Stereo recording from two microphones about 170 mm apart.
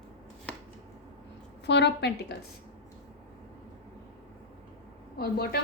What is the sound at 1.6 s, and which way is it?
Speech, 85° left.